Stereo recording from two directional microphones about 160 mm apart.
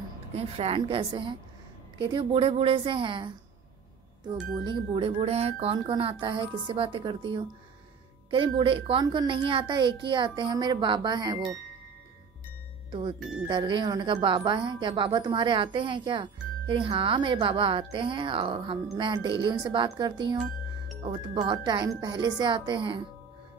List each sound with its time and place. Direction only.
0.4 s a woman's voice: 40° right (ahead or behind)
12.9 s a woman's voice: 30° right (ahead or behind)